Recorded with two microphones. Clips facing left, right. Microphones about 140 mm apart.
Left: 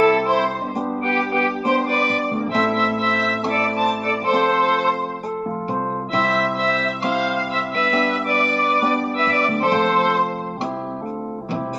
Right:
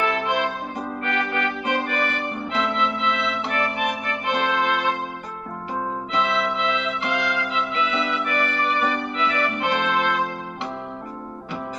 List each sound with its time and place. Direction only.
0.0 s music: 35° left (ahead or behind)
6.1 s music: 40° left (ahead or behind)